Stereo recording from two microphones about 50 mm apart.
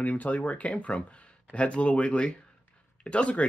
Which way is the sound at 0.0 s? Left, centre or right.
Left.